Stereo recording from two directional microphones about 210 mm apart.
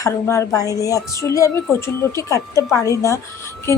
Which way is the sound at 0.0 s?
15° left (ahead or behind).